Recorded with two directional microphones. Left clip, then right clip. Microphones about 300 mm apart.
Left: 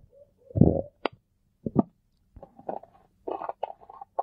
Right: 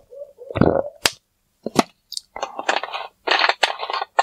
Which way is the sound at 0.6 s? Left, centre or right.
Centre.